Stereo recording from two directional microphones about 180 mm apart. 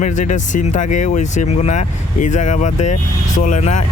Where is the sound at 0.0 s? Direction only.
45° left (ahead or behind).